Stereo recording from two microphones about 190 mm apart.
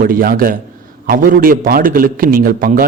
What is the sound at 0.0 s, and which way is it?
A man's voice, 50° right (ahead or behind).